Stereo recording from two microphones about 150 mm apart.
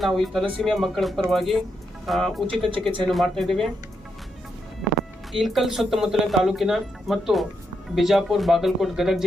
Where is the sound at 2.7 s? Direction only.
35° right (ahead or behind).